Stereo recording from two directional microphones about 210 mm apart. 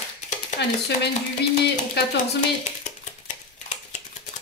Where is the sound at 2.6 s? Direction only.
35° left (ahead or behind).